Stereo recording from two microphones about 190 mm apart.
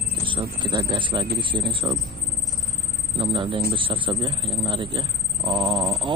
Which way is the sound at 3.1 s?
25° right (ahead or behind).